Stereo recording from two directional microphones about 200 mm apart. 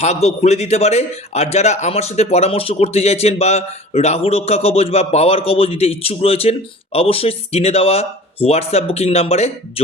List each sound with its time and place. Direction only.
0.0 s a man's voice: 35° left (ahead or behind)